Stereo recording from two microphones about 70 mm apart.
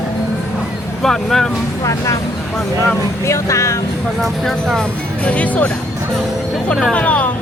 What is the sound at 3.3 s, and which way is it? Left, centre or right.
Speech, left.